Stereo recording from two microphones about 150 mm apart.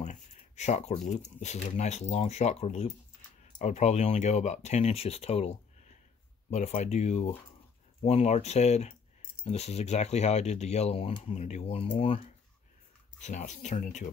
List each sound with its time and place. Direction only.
0.0 s speech: 50° left (ahead or behind)
13.2 s speech: 55° left (ahead or behind)